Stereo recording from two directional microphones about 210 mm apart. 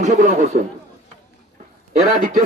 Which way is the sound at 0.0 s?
35° right (ahead or behind).